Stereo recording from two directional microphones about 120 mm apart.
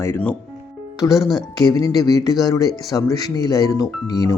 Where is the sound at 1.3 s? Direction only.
40° left (ahead or behind).